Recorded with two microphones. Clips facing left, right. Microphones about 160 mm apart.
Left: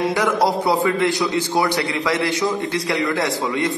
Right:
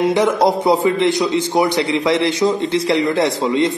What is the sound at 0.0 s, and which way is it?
A man's voice, 20° right (ahead or behind).